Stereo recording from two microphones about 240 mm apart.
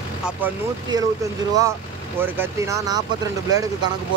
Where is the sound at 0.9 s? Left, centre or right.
Centre.